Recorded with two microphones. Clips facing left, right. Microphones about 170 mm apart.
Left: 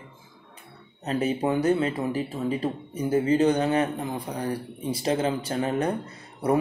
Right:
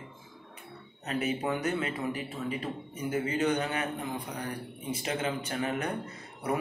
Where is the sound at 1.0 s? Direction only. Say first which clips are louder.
Left 6 dB; 30° left (ahead or behind).